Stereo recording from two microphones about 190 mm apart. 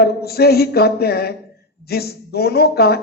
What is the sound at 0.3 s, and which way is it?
A man's voice, 55° left (ahead or behind).